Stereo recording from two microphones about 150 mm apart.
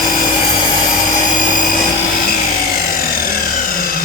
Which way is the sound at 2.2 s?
75° left (ahead or behind).